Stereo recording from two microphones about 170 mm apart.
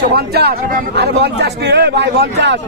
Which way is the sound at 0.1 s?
65° right (ahead or behind).